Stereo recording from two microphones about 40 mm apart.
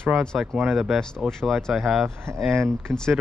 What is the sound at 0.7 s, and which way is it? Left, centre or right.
Speech, centre.